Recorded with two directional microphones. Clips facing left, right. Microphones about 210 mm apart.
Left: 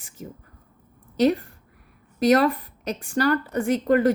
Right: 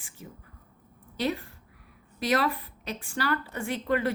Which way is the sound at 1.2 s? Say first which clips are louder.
Left 10 dB; 45° left (ahead or behind).